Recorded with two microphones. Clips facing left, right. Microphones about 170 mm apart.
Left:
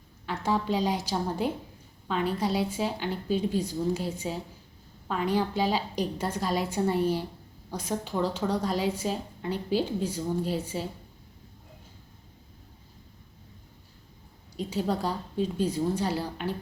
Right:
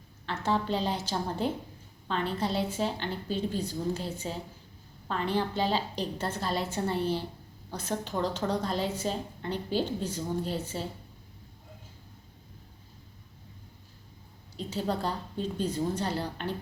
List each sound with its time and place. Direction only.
0.3 s a woman's voice: 10° left (ahead or behind)
14.5 s a woman's voice: 10° left (ahead or behind)